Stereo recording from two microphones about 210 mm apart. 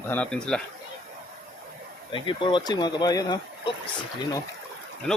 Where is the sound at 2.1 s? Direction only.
25° left (ahead or behind).